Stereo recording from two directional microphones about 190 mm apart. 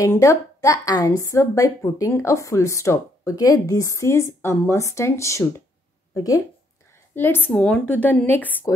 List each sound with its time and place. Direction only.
0.0 s a woman's voice: 15° left (ahead or behind)